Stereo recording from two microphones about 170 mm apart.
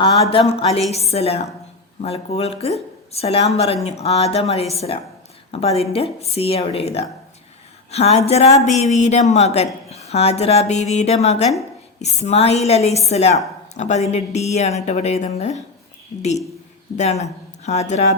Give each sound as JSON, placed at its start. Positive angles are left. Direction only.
{"t": 0.0, "sound": "a woman's voice", "side_deg": 30}